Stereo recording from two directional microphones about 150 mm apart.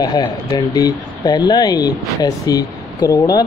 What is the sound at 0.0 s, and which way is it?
A man's voice, 35° left (ahead or behind).